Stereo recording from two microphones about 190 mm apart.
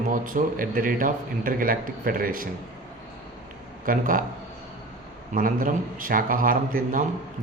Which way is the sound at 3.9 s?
45° right (ahead or behind).